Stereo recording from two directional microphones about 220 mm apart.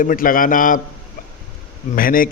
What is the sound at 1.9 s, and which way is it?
Speech, 40° left (ahead or behind).